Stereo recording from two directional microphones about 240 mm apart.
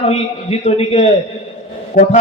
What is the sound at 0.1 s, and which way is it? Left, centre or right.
A man's voice, left.